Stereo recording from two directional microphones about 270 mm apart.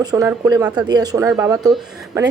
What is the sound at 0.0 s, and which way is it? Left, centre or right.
A woman's voice, centre.